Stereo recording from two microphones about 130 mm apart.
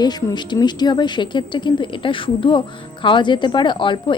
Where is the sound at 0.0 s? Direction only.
30° left (ahead or behind).